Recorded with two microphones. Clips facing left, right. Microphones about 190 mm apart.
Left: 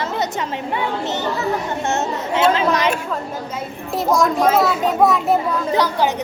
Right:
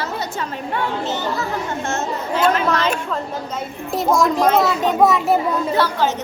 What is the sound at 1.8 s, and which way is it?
Chatter, 20° left (ahead or behind).